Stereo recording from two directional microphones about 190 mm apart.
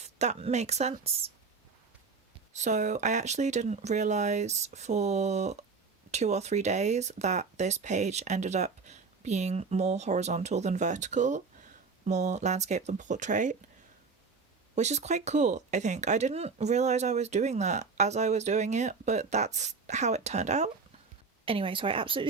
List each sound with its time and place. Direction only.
0.0 s speech: 35° right (ahead or behind)
2.5 s speech: 40° right (ahead or behind)
14.8 s a woman's voice: 35° right (ahead or behind)